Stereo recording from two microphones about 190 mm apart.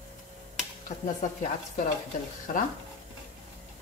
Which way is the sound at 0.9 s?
35° left (ahead or behind).